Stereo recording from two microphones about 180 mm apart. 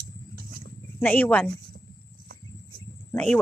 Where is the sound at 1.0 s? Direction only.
10° left (ahead or behind).